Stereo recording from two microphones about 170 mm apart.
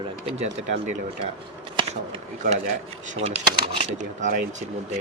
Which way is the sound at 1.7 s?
30° right (ahead or behind).